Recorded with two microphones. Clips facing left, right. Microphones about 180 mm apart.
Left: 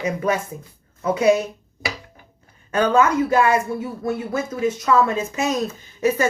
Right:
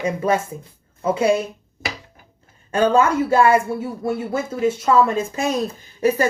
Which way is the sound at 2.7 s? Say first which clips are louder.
Right 1 dB; 30° right (ahead or behind).